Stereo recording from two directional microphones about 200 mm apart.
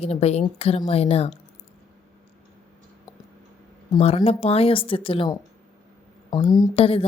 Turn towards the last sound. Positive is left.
turn(degrees=30)  # may be behind; listen again after turning